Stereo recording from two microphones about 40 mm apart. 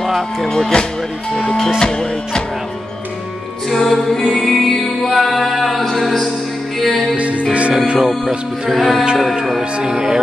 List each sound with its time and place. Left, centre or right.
0.0 s speech: centre
0.5 s speech: centre
1.8 s music: centre
3.7 s music: centre
7.2 s music: right
7.7 s music: centre
8.6 s music: centre
9.8 s speech: centre